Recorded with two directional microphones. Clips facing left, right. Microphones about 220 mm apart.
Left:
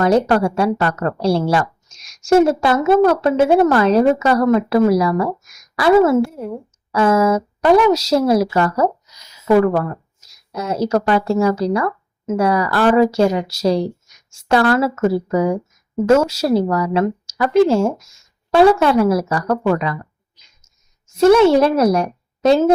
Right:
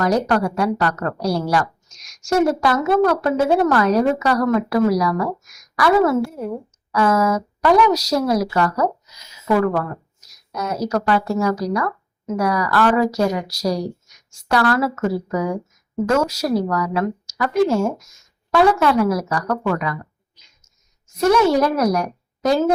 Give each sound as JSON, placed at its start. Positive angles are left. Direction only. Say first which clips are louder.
{"t": 0.0, "sound": "a woman's voice", "louder": "left 4 dB", "side_deg": 30}
{"t": 21.2, "sound": "a woman's voice", "louder": "left 5 dB", "side_deg": 25}